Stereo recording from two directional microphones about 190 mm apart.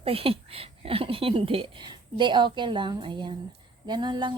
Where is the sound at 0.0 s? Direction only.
30° right (ahead or behind).